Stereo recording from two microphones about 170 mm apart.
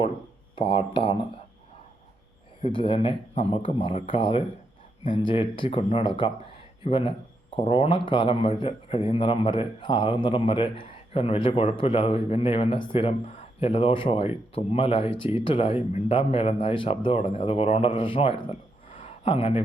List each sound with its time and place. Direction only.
0.5 s speech: 35° left (ahead or behind)
2.6 s speech: 30° left (ahead or behind)